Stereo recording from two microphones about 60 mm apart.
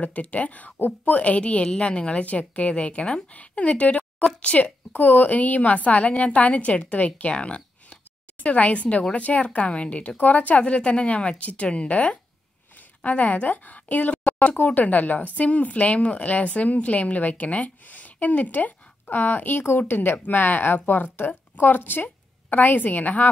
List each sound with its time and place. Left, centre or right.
0.0 s a woman's voice: left